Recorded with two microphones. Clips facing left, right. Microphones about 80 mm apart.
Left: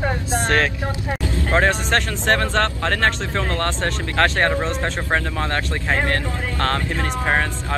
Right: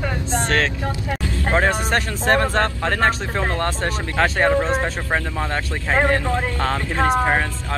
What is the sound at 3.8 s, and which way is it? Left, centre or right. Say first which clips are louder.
Speech: left 2 dB; centre.